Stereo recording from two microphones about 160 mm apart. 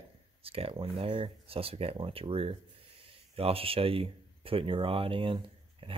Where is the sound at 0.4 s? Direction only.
35° right (ahead or behind).